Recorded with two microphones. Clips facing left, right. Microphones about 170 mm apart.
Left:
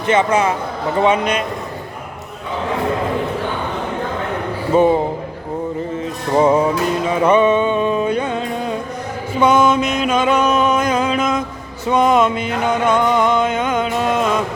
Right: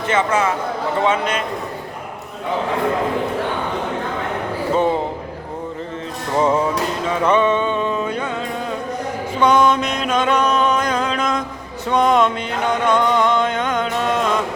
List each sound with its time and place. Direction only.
0.1 s music: 20° left (ahead or behind)
4.7 s a man's voice: 10° left (ahead or behind)
6.3 s music: 15° left (ahead or behind)
9.4 s music: 5° left (ahead or behind)